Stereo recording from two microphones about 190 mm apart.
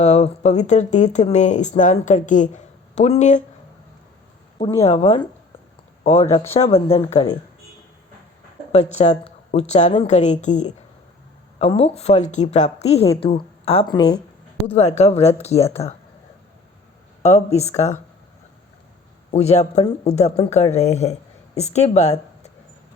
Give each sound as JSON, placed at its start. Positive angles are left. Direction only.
{"t": 0.0, "sound": "speech", "side_deg": 35}
{"t": 4.8, "sound": "speech", "side_deg": 35}
{"t": 8.7, "sound": "speech", "side_deg": 35}
{"t": 17.2, "sound": "speech", "side_deg": 35}
{"t": 19.3, "sound": "speech", "side_deg": 35}